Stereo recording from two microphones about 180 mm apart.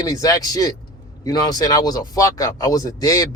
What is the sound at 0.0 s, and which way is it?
A man's voice, 20° left (ahead or behind).